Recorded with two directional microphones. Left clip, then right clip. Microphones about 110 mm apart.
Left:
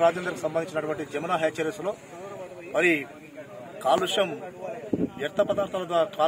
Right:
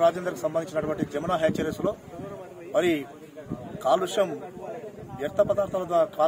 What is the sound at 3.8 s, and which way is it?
A man's voice, 20° right (ahead or behind).